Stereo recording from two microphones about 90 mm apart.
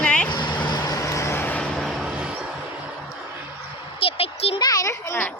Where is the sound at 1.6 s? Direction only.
10° left (ahead or behind).